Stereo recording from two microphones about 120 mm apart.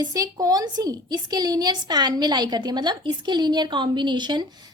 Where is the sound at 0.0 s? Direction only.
30° right (ahead or behind).